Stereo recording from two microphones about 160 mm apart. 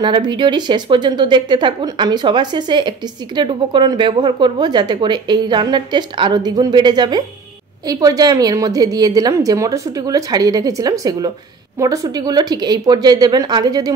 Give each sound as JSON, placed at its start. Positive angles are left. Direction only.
{"t": 0.0, "sound": "a woman's voice", "side_deg": -30}